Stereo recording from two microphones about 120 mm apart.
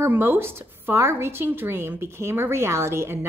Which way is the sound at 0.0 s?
15° right (ahead or behind).